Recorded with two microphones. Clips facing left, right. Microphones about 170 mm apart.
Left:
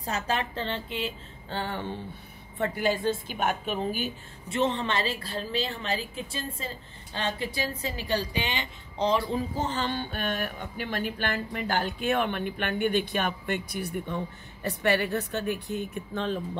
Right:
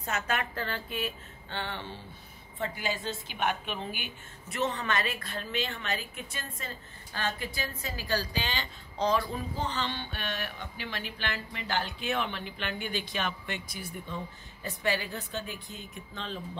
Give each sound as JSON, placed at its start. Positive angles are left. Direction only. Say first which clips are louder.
{"t": 0.0, "sound": "a woman's voice", "louder": "left 3 dB", "side_deg": 30}
{"t": 1.5, "sound": "a woman's voice", "louder": "left 5 dB", "side_deg": 40}
{"t": 2.6, "sound": "a woman's voice", "louder": "left 7 dB", "side_deg": 55}
{"t": 4.5, "sound": "a woman's voice", "louder": "left 4 dB", "side_deg": 25}
{"t": 9.6, "sound": "a woman's voice", "louder": "left 4 dB", "side_deg": 45}